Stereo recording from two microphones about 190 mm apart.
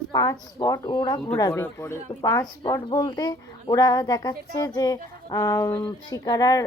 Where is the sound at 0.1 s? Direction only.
20° left (ahead or behind).